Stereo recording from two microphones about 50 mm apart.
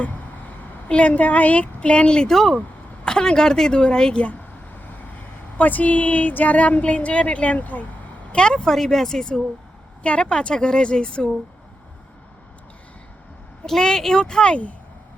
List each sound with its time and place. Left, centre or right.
0.0 s a woman's voice: left
5.5 s speech: left
8.3 s a woman's voice: centre
13.7 s a woman's voice: centre